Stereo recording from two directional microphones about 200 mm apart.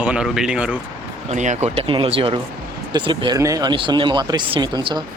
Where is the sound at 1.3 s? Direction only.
35° right (ahead or behind).